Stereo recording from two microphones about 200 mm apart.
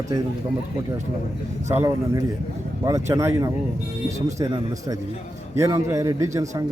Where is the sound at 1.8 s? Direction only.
15° right (ahead or behind).